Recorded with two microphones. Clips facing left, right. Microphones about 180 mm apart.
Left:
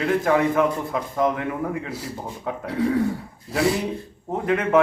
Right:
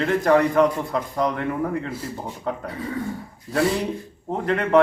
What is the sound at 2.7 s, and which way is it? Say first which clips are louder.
Speech: left 8 dB; 80° left.